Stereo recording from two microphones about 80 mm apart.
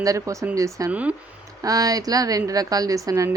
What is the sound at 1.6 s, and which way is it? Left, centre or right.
Speech, right.